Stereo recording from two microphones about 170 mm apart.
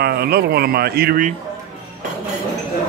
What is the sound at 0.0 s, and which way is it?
Speech, 65° right (ahead or behind).